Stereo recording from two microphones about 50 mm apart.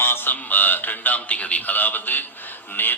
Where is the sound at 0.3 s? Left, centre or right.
Left.